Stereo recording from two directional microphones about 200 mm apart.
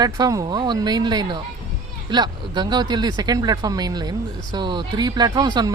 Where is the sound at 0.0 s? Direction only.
20° right (ahead or behind).